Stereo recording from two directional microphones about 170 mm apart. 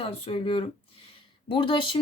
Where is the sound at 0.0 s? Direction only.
35° left (ahead or behind).